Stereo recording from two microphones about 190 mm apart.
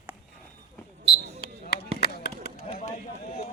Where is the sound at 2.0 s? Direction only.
60° left (ahead or behind).